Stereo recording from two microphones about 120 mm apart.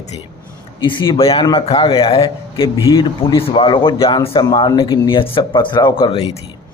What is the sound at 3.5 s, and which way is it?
Speech, 45° left (ahead or behind).